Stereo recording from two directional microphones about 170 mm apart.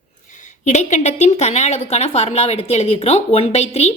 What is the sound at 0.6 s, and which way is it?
Speech, 45° left (ahead or behind).